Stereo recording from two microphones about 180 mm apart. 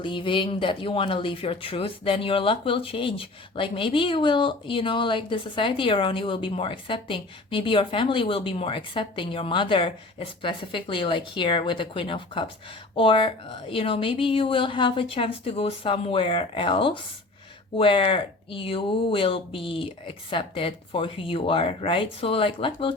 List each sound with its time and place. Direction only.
0.0 s speech: 25° left (ahead or behind)